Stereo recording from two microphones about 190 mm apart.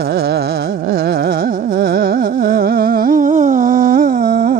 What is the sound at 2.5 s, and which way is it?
Humming, 50° right (ahead or behind).